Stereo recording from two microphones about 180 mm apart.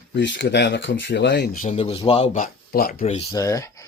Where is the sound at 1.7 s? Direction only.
35° left (ahead or behind); by 3.0 s 55° left (ahead or behind).